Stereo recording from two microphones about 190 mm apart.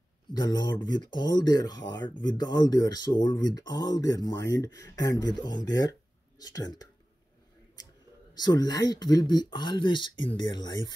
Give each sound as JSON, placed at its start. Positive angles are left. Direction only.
{"t": 0.3, "sound": "speech", "side_deg": 20}
{"t": 8.4, "sound": "speech", "side_deg": 20}